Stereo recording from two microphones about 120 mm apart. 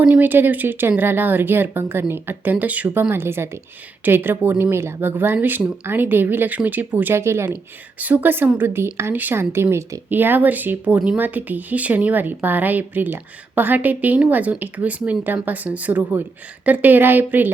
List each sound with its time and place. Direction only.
0.0 s a woman's voice: 15° right (ahead or behind)